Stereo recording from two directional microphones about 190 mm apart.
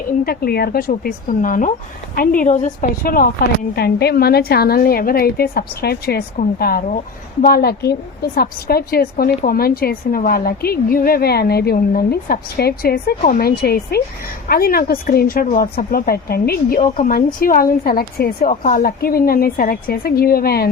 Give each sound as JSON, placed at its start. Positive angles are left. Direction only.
{"t": 0.3, "sound": "a woman's voice", "side_deg": 55}